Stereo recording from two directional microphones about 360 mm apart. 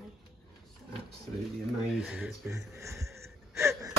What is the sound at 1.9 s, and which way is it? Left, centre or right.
Speech, centre.